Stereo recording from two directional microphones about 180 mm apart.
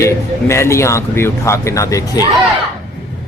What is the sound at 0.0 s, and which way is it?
Speech, 15° left (ahead or behind).